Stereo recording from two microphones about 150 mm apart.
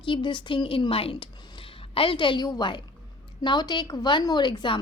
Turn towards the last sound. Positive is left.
turn(degrees=30)  # may be behind; listen again after turning